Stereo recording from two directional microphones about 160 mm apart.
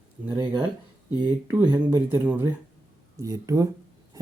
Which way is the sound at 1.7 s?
15° right (ahead or behind).